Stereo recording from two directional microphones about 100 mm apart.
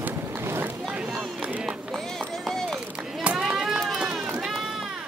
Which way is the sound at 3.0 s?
Centre (ahead or behind).